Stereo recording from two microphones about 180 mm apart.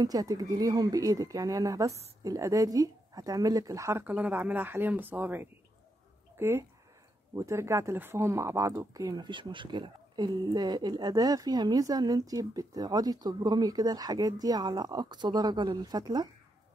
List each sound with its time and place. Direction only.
0.0 s speech: 20° right (ahead or behind)